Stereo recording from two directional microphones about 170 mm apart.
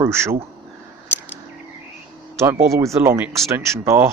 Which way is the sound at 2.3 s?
15° right (ahead or behind).